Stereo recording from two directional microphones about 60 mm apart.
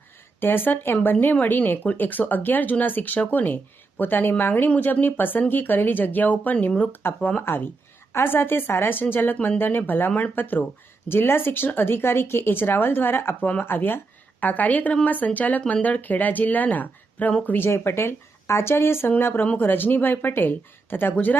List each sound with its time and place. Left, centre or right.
0.3 s speech: left
7.4 s speech: left